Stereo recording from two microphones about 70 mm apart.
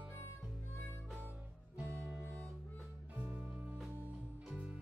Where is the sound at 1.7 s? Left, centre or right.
Right.